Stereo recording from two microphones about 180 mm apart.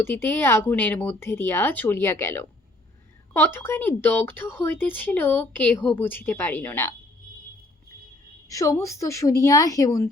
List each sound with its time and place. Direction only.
0.0 s speech: 10° left (ahead or behind)
8.4 s speech: 20° left (ahead or behind)